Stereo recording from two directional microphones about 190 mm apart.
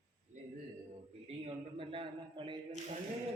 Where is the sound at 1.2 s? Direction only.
30° right (ahead or behind).